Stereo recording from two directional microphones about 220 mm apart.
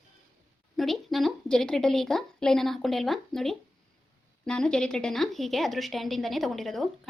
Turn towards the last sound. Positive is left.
turn(degrees=0)  # may be behind; listen again after turning